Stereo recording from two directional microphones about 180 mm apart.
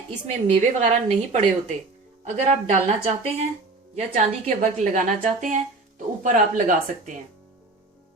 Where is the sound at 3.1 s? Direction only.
35° right (ahead or behind).